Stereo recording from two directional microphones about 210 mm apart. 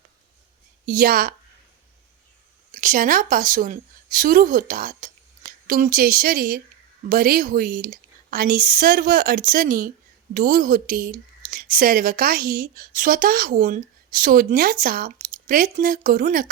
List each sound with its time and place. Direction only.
0.9 s speech: 45° right (ahead or behind)
2.7 s speech: 40° right (ahead or behind)